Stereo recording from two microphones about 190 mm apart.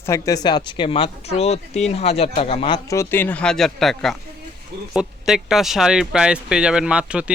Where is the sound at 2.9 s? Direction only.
15° left (ahead or behind).